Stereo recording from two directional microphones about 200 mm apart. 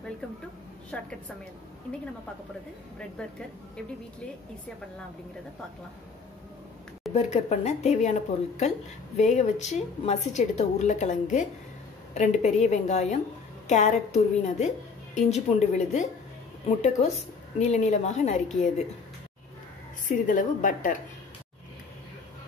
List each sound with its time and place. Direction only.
0.9 s a woman's voice: 5° left (ahead or behind)
7.2 s a woman's voice: 35° left (ahead or behind)
20.1 s speech: 40° left (ahead or behind)